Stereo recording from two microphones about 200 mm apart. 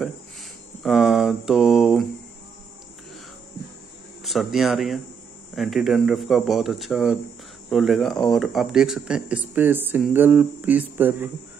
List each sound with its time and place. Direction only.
0.8 s mantra: centre (ahead or behind)
4.2 s speech: centre (ahead or behind)